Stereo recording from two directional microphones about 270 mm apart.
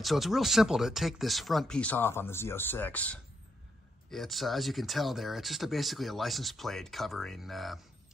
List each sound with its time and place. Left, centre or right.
0.0 s speech: centre